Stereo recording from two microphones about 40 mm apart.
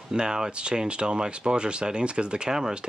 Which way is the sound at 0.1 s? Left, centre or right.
Centre.